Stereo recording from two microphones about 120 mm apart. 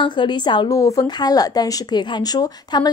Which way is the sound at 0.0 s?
40° left (ahead or behind).